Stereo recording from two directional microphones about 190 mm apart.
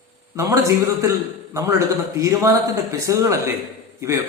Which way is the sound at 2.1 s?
15° right (ahead or behind).